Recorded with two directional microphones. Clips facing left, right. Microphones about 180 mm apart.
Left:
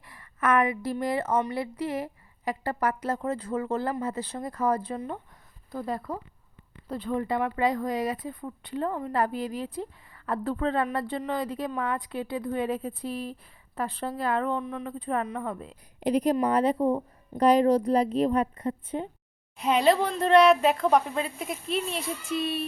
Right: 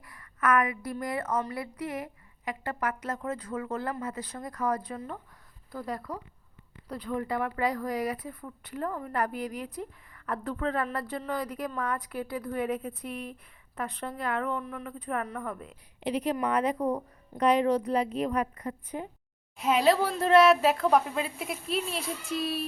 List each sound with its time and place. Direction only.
0.0 s a woman's voice: 25° left (ahead or behind)
14.6 s a woman's voice: 20° left (ahead or behind)
16.0 s a woman's voice: 40° left (ahead or behind)
19.5 s speech: centre (ahead or behind)